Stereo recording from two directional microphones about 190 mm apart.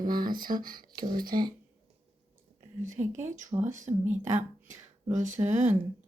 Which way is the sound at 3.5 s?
15° right (ahead or behind).